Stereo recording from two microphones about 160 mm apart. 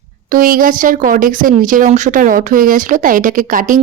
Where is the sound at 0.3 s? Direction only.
60° right (ahead or behind).